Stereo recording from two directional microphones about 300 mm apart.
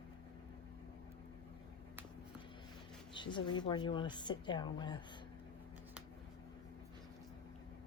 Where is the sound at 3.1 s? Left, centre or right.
Centre.